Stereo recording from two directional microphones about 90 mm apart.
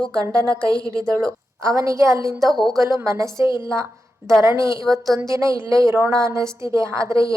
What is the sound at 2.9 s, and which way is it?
A woman's voice, 30° right (ahead or behind).